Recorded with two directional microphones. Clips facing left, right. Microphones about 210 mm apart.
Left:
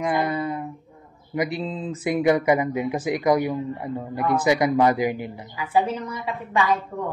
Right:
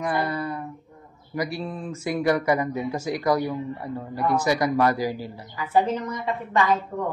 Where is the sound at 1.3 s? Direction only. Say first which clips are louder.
Left 3 dB; 20° left (ahead or behind).